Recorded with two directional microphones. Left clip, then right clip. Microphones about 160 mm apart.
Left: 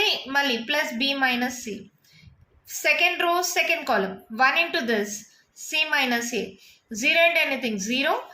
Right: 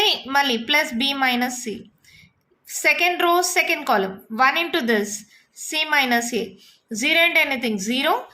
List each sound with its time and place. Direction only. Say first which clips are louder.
0.0 s a woman's voice: right 4 dB; 45° right (ahead or behind)
2.8 s a woman's voice: right 3 dB; 45° right (ahead or behind)